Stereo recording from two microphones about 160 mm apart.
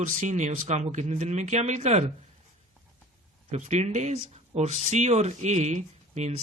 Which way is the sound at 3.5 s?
45° right (ahead or behind).